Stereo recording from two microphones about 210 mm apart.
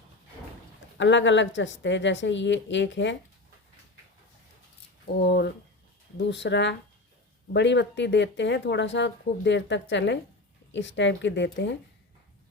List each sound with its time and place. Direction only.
0.9 s speech: 60° left (ahead or behind)
5.2 s speech: 50° left (ahead or behind)